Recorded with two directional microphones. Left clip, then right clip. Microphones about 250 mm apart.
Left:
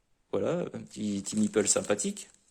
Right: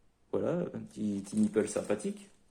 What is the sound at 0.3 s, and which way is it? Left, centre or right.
Speech, left.